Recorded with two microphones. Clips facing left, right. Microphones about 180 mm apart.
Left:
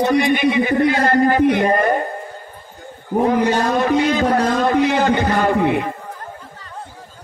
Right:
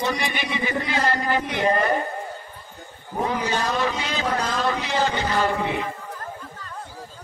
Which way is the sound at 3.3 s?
55° left (ahead or behind).